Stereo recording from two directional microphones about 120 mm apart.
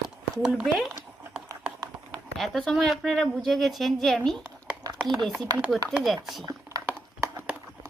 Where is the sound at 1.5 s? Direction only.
30° right (ahead or behind).